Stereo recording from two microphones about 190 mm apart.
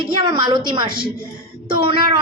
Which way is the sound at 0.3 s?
25° right (ahead or behind).